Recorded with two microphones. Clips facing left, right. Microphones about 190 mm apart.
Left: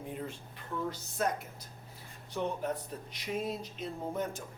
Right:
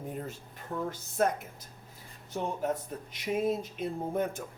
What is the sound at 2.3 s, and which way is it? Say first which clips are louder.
A man's voice: right 2 dB; 45° right (ahead or behind).